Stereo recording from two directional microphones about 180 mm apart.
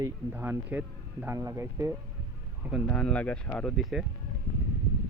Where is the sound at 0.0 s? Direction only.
10° right (ahead or behind).